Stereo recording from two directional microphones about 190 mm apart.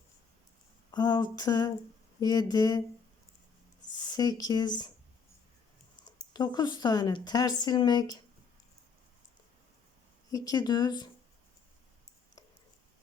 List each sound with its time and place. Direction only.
0.9 s speech: 20° left (ahead or behind)
4.0 s speech: 20° left (ahead or behind)
6.1 s speech: 20° left (ahead or behind)
10.3 s speech: 20° left (ahead or behind)